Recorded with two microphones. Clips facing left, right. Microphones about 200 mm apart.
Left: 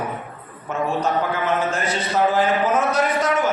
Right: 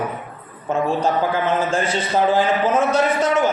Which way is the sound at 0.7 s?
30° right (ahead or behind).